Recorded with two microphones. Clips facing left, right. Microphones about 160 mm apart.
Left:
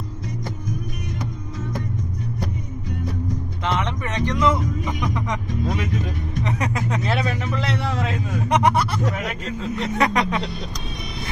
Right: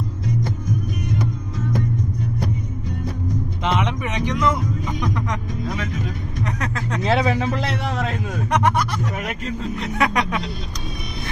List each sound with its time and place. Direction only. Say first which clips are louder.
3.6 s music: right 2 dB; 20° right (ahead or behind)
4.4 s vehicle: left 2 dB; 5° left (ahead or behind)
6.4 s vehicle: left 1 dB; 10° left (ahead or behind)
7.1 s vehicle: right 8 dB; 90° right
8.5 s a sound: left 1 dB; 10° left (ahead or behind)
9.7 s speech: left 1 dB; centre (ahead or behind)